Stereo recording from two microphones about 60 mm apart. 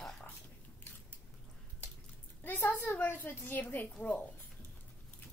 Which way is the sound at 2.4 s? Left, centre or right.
Left.